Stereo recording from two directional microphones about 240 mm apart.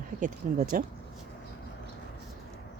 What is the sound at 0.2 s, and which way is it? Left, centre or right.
Speech, right.